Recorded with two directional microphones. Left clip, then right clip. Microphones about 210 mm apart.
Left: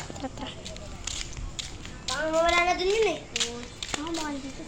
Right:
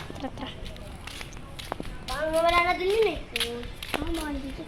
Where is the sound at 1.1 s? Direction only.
35° right (ahead or behind).